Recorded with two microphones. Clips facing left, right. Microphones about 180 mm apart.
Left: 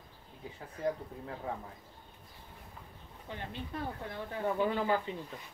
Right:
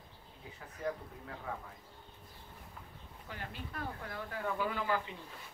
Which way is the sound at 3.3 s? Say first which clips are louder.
Left 4 dB; 25° left (ahead or behind).